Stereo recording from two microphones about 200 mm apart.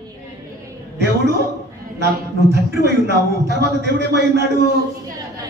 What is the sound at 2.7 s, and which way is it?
A man's voice, 55° right (ahead or behind).